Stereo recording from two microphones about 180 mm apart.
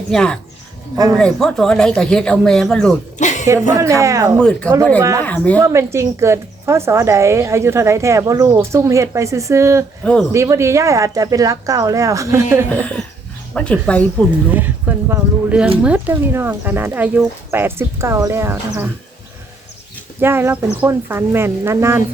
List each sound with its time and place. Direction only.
0.1 s speech: 5° left (ahead or behind)
3.2 s music: 40° left (ahead or behind)
3.4 s a woman's voice: 15° right (ahead or behind)
4.4 s speech: 5° left (ahead or behind)
4.9 s a woman's voice: 15° right (ahead or behind)
5.2 s speech: 10° left (ahead or behind)
5.5 s a woman's voice: 15° right (ahead or behind)
10.0 s speech: 5° left (ahead or behind)
10.3 s a woman's voice: 15° right (ahead or behind)
12.8 s speech: 5° left (ahead or behind)
14.5 s a woman's voice: 10° right (ahead or behind)
20.2 s a woman's voice: 15° right (ahead or behind)